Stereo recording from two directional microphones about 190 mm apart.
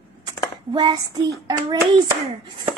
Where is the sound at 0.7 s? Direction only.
25° right (ahead or behind).